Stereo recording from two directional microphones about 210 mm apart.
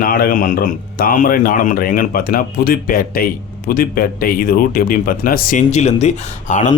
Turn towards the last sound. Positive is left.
turn(degrees=35)  # may be behind; listen again after turning